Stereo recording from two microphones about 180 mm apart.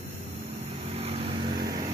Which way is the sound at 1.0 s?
35° right (ahead or behind).